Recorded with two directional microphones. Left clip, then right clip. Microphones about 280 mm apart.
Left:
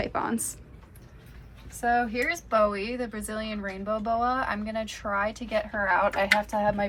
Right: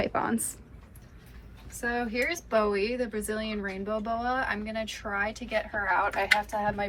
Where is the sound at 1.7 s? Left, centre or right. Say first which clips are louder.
Left 4 dB; centre.